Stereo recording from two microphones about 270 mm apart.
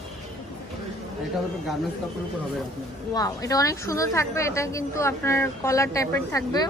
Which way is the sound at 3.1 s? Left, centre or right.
Centre.